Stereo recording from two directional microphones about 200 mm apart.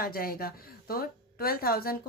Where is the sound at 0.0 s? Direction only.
50° left (ahead or behind).